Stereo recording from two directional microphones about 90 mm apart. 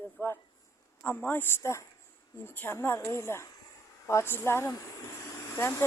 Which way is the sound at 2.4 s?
25° left (ahead or behind).